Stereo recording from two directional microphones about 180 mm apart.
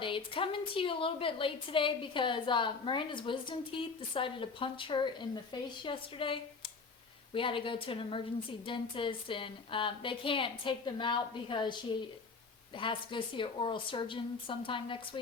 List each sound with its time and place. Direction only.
0.0 s a woman's voice: 30° left (ahead or behind)